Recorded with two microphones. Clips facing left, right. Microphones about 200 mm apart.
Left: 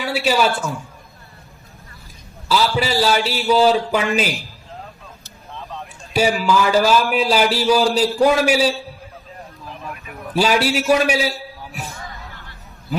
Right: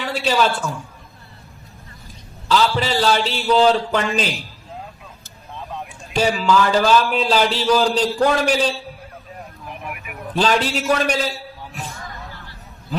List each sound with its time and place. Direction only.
0.0 s a man's voice: 10° left (ahead or behind)
2.5 s a man's voice: 10° left (ahead or behind)
6.1 s a man's voice: 10° left (ahead or behind)
9.6 s vehicle: 15° right (ahead or behind)
10.3 s a man's voice: 10° left (ahead or behind)